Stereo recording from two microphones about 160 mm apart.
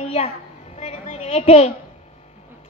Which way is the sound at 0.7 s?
45° left (ahead or behind).